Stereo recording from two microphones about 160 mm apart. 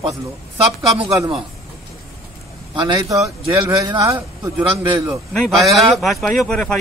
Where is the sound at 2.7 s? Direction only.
25° right (ahead or behind).